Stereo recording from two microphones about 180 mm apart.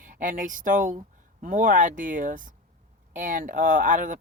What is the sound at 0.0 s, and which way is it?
Speech, 45° right (ahead or behind).